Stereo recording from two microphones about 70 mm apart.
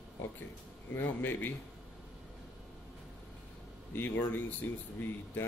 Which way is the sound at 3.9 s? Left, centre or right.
Left.